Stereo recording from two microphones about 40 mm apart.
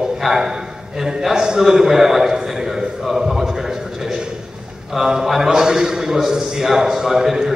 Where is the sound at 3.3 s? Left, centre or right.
Centre.